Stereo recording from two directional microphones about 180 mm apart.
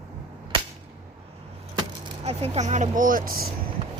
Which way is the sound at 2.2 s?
35° right (ahead or behind).